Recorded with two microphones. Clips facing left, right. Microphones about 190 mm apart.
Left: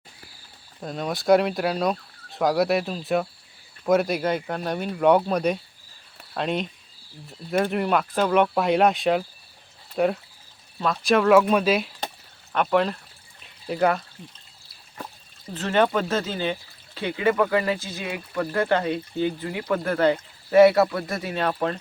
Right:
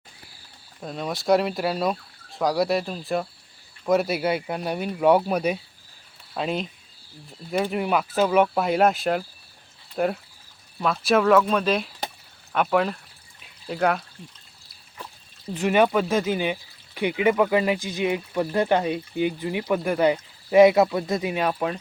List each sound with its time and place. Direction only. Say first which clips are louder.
0.8 s speech: left 1 dB; centre (ahead or behind)
12.5 s speech: even; 5° right (ahead or behind)
15.5 s speech: right 2 dB; 10° right (ahead or behind)